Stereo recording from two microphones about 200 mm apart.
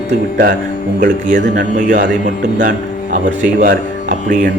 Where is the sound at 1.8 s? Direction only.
40° right (ahead or behind).